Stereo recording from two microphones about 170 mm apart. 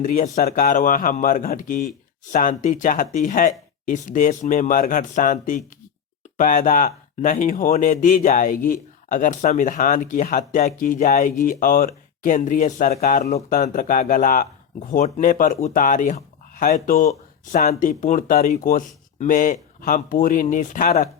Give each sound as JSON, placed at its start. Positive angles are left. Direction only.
{"t": 0.0, "sound": "speech", "side_deg": 50}